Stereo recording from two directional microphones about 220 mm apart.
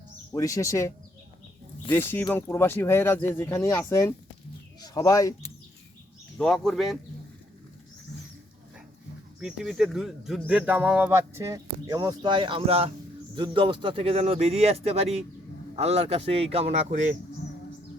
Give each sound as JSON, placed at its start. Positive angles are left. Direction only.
{"t": 0.3, "sound": "speech", "side_deg": 15}
{"t": 6.3, "sound": "speech", "side_deg": 5}
{"t": 9.4, "sound": "speech", "side_deg": -5}